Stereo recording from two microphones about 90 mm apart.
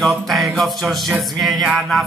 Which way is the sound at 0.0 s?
Centre (ahead or behind).